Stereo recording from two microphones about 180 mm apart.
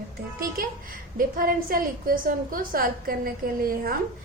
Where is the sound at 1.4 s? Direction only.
50° right (ahead or behind).